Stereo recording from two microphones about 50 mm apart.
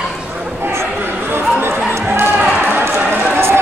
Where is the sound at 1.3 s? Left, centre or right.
Right.